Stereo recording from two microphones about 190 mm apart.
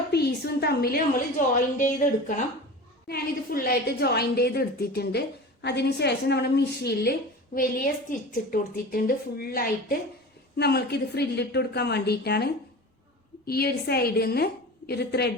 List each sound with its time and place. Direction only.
0.1 s a woman's voice: 60° left (ahead or behind)